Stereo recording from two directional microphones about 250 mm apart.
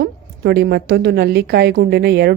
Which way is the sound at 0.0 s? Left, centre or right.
Right.